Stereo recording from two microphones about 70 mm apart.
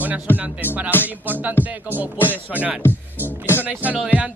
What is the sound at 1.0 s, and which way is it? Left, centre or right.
Speech, right.